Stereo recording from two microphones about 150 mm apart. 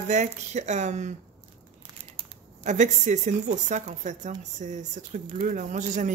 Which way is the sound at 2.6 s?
55° right (ahead or behind).